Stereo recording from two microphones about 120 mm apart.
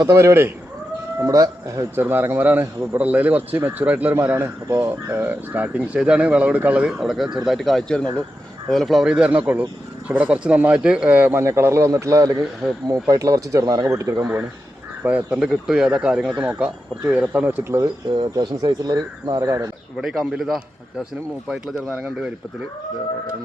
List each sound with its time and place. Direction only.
0.0 s speech: 25° right (ahead or behind)
15.0 s speech: 10° right (ahead or behind)
18.1 s speech: 40° right (ahead or behind)
20.0 s speech: 5° right (ahead or behind)
21.8 s speech: 15° right (ahead or behind)